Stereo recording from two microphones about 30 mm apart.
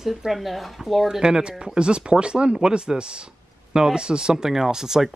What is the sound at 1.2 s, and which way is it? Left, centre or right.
Speech, right.